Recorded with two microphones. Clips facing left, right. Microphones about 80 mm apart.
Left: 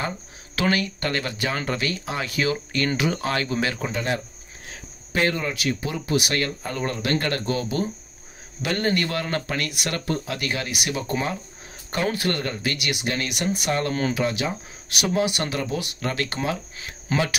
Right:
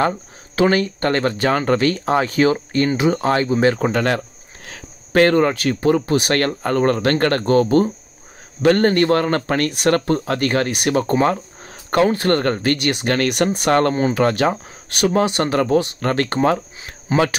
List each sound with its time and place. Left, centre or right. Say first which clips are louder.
0.6 s speech: right 7 dB; right
3.7 s speech: right 9 dB; right
4.6 s speech: right 4 dB; right
13.1 s speech: right 10 dB; right
15.6 s speech: right 10 dB; right
17.1 s speech: right 7 dB; right